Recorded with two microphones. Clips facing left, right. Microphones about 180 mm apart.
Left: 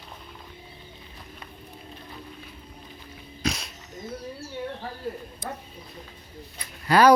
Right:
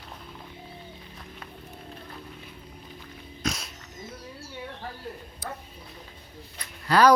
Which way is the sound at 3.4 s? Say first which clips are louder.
Left 2 dB; centre (ahead or behind).